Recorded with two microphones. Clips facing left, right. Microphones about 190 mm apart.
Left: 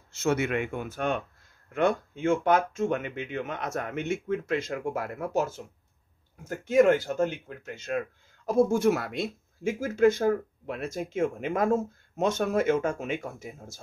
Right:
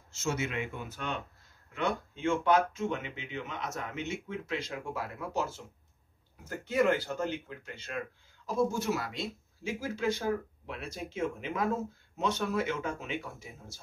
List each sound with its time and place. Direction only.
0.1 s speech: 60° left (ahead or behind)
6.7 s speech: 45° left (ahead or behind)